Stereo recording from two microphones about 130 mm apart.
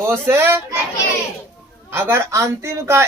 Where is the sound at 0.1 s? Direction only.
20° right (ahead or behind).